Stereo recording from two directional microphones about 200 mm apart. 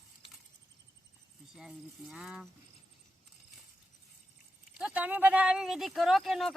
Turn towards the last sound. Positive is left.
turn(degrees=0)  # may be behind; listen again after turning